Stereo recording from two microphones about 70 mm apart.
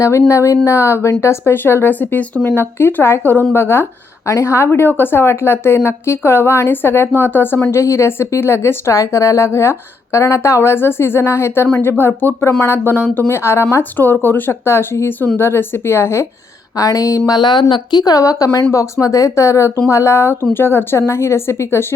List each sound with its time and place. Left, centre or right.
0.0 s speech: left
7.8 s speech: left
16.7 s speech: left